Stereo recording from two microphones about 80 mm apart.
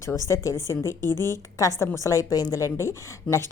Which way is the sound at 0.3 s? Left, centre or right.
Left.